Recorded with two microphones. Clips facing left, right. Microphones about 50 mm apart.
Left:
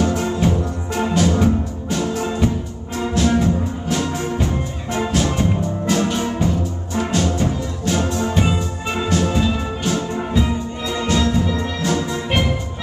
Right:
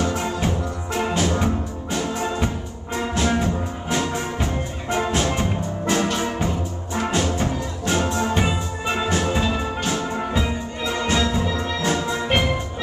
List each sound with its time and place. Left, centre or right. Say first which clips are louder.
0.0 s music: left 4 dB; centre